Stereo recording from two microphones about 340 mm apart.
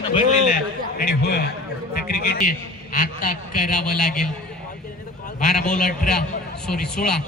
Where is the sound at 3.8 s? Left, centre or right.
Centre.